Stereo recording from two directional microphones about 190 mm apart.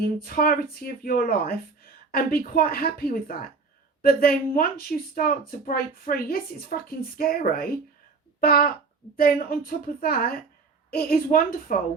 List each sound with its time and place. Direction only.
0.0 s a woman's voice: 50° left (ahead or behind)